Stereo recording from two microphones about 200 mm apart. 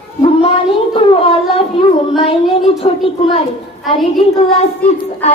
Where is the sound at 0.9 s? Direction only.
25° left (ahead or behind).